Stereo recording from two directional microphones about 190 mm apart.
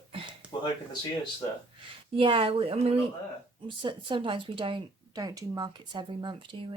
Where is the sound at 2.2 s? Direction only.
30° right (ahead or behind).